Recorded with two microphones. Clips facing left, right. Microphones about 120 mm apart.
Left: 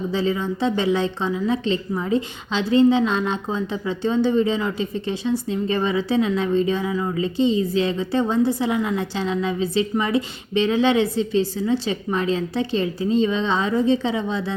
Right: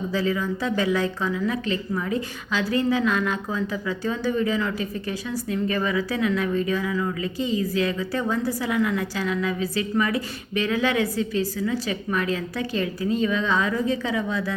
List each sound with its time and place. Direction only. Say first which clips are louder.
0.1 s a woman's voice: left 1 dB; 25° left (ahead or behind)